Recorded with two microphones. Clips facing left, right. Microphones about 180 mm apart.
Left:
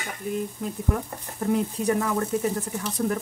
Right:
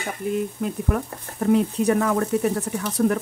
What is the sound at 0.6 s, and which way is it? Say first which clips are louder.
Speech: right 3 dB; 75° right (ahead or behind).